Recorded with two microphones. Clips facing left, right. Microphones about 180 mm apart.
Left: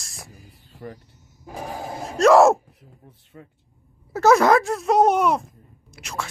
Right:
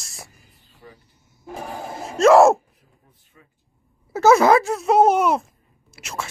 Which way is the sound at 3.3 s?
50° left (ahead or behind).